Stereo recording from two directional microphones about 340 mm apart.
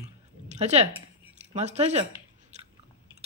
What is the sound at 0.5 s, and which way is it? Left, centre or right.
Speech, centre.